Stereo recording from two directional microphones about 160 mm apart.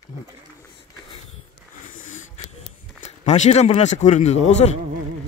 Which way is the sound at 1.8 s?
50° left (ahead or behind).